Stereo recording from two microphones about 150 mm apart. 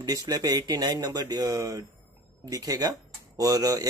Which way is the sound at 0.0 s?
25° right (ahead or behind).